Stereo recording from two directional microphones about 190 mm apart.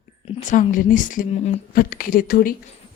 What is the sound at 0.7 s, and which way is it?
Speech, 45° left (ahead or behind).